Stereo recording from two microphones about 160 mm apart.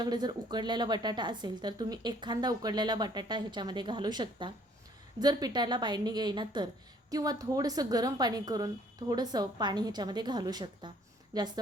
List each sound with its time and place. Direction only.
0.0 s a woman's voice: 25° right (ahead or behind)